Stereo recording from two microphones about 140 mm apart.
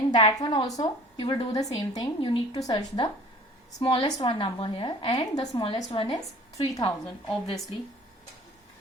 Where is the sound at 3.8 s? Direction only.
40° left (ahead or behind).